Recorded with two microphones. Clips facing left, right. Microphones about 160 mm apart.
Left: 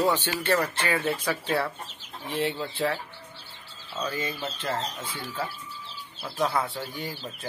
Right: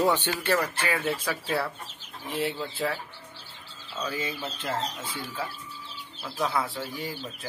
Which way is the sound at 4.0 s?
10° right (ahead or behind).